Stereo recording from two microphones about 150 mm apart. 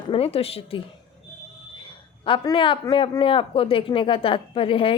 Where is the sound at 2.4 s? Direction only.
35° left (ahead or behind).